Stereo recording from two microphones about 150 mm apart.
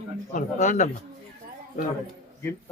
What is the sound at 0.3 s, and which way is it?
Speech, 55° left (ahead or behind).